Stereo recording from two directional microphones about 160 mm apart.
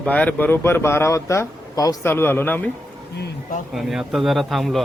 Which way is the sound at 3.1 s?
90° left.